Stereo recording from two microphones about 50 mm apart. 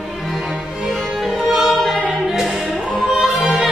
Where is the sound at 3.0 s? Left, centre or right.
Centre.